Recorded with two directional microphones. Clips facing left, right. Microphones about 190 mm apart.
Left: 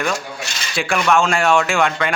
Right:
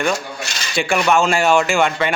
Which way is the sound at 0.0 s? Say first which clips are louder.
Right 2 dB; centre (ahead or behind).